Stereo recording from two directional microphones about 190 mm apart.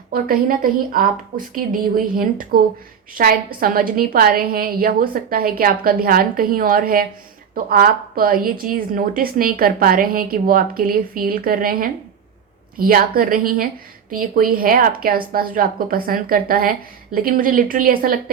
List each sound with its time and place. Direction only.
0.1 s a woman's voice: 50° right (ahead or behind)